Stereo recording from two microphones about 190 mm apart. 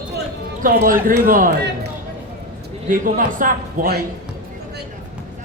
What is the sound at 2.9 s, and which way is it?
A man's voice, 45° right (ahead or behind).